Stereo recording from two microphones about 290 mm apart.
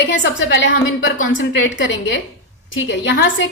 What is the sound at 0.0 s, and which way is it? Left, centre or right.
A woman's voice, left.